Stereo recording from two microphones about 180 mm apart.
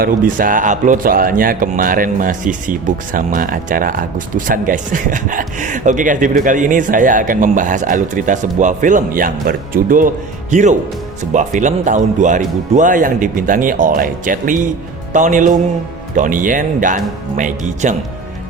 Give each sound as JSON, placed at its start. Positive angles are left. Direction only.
{"t": 0.0, "sound": "speech", "side_deg": -50}